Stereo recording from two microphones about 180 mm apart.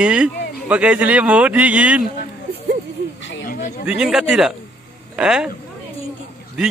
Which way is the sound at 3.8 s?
5° right (ahead or behind).